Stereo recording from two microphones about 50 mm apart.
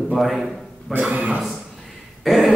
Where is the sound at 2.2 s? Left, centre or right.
Centre.